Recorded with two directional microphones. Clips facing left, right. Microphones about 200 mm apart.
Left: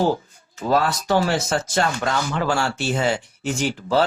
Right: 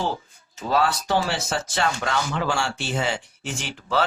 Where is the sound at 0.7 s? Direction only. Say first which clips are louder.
Left 2 dB; 45° left (ahead or behind).